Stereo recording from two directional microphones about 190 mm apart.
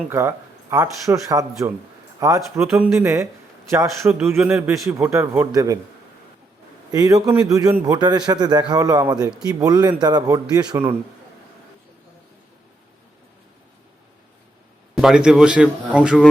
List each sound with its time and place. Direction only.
0.1 s a man's voice: 15° right (ahead or behind)
6.9 s a man's voice: 20° right (ahead or behind)
14.9 s a man's voice: 5° right (ahead or behind)